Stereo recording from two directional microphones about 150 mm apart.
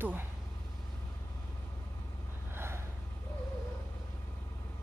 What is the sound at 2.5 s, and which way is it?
Gasp, 15° right (ahead or behind).